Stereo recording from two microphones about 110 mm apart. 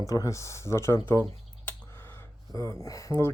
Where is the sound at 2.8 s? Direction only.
30° left (ahead or behind).